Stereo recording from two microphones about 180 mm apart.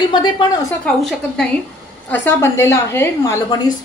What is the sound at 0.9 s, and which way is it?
A woman's voice, 5° left (ahead or behind).